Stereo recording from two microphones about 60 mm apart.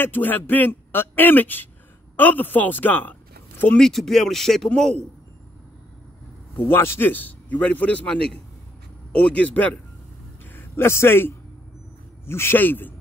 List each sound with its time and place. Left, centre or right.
0.0 s speech: left
3.7 s speech: centre
6.7 s speech: left
7.1 s a man's voice: left
10.4 s a man's voice: left